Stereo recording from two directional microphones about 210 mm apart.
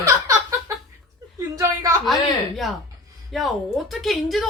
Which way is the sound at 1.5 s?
15° right (ahead or behind).